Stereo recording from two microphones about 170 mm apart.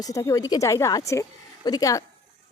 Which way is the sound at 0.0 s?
20° left (ahead or behind).